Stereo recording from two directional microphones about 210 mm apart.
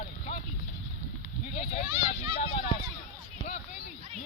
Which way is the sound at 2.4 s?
30° left (ahead or behind).